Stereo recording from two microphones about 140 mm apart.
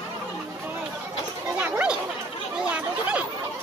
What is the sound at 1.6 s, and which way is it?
Chatter, 10° right (ahead or behind).